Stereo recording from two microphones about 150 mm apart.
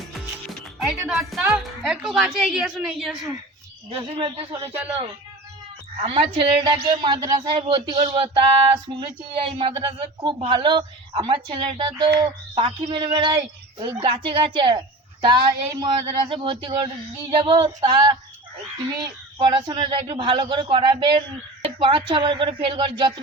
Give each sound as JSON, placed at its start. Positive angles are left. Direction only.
{"t": 0.4, "sound": "speech", "side_deg": 0}
{"t": 3.8, "sound": "speech", "side_deg": -35}
{"t": 6.0, "sound": "speech", "side_deg": -40}
{"t": 19.4, "sound": "speech", "side_deg": -30}